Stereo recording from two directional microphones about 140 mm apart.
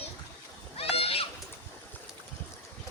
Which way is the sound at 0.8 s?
45° left (ahead or behind).